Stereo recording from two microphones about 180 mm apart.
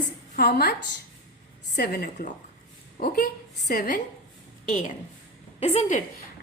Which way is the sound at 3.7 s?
50° left (ahead or behind).